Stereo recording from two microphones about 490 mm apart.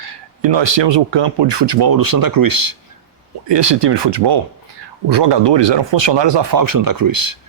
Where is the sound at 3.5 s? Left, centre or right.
Right.